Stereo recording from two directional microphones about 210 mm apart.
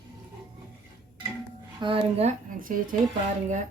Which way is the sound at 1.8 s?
25° right (ahead or behind).